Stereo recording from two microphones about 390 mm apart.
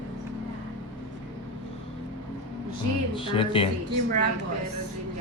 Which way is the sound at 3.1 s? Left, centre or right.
Centre.